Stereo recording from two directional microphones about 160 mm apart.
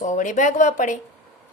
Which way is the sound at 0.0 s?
50° left (ahead or behind).